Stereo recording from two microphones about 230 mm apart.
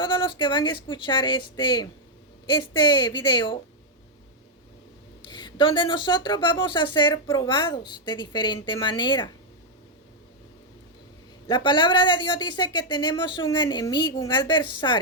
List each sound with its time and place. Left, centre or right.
0.0 s speech: left
5.2 s speech: centre
11.4 s speech: centre